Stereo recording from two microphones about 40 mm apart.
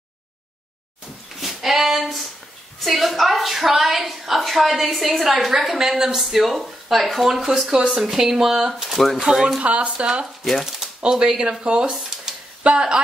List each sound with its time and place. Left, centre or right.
1.3 s a sound: centre
2.8 s a woman's voice: centre
6.1 s a woman's voice: centre
8.8 s a woman's voice: centre
9.2 s speech: centre
9.6 s speech: right
9.8 s speech: right
10.6 s speech: centre
11.0 s speech: right
11.9 s a sound: centre
12.6 s speech: right